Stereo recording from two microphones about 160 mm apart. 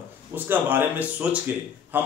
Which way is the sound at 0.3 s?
10° right (ahead or behind).